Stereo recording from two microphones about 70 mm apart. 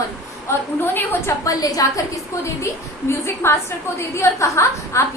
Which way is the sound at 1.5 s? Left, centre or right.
Left.